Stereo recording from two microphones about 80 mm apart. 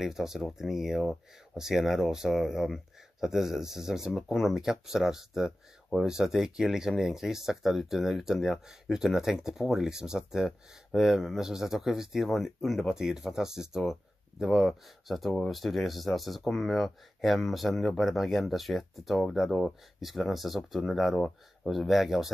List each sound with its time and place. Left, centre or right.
0.0 s speech: centre